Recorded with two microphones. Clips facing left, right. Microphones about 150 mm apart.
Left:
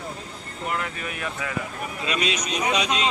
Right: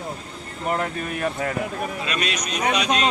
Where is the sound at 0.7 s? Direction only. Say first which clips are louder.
Right 6 dB; 40° right (ahead or behind).